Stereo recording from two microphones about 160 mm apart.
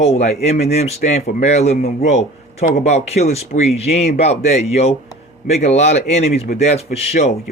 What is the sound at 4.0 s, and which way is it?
Speech, 40° left (ahead or behind).